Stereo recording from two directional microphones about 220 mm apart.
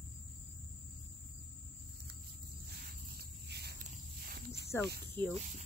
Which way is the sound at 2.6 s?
45° right (ahead or behind).